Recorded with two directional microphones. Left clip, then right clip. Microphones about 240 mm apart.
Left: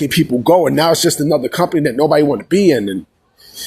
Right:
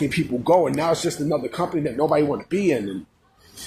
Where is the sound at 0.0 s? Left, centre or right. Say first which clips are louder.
Left 9 dB; left.